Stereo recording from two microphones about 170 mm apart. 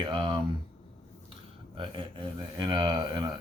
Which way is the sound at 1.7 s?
30° right (ahead or behind).